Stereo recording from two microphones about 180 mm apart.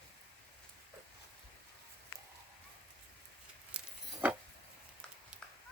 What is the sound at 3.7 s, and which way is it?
Keys jangling, 5° right (ahead or behind).